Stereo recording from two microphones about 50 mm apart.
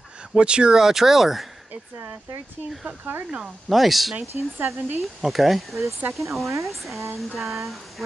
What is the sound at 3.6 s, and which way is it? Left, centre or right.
Speech, centre.